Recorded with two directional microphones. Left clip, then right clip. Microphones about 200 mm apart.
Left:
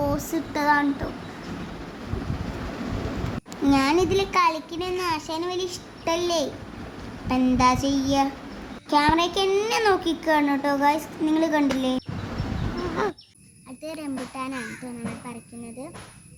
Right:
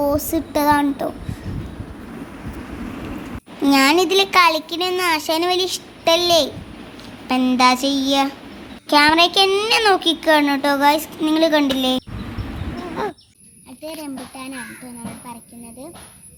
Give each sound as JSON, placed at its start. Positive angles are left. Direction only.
{"t": 0.0, "sound": "speech", "side_deg": -25}
{"t": 3.6, "sound": "a child's voice", "side_deg": -15}
{"t": 14.0, "sound": "speech", "side_deg": 15}